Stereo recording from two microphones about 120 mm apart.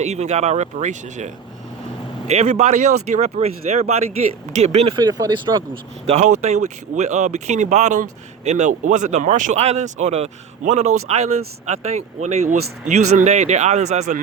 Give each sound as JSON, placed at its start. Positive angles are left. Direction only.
{"t": 0.0, "sound": "speech", "side_deg": -65}
{"t": 2.2, "sound": "speech", "side_deg": -70}
{"t": 4.9, "sound": "speech", "side_deg": -35}
{"t": 6.1, "sound": "speech", "side_deg": -70}